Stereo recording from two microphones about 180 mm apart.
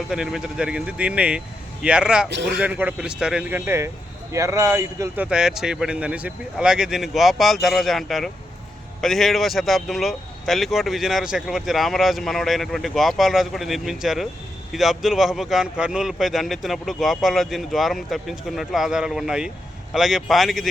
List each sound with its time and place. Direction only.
0.1 s speech: 5° right (ahead or behind)
2.3 s a man's voice: 70° right (ahead or behind)
2.6 s speech: 10° right (ahead or behind)